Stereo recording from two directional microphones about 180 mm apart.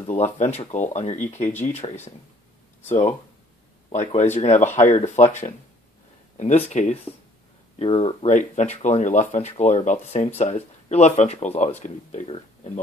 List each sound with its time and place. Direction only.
0.0 s speech: 35° left (ahead or behind)